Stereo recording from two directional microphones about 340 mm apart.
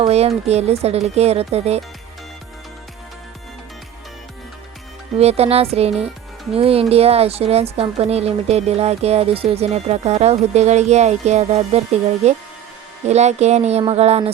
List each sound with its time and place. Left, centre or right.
0.0 s a woman's voice: centre
5.1 s a woman's voice: centre